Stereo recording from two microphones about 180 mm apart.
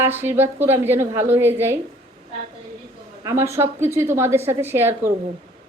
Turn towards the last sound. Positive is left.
turn(degrees=-15)  # may be behind; listen again after turning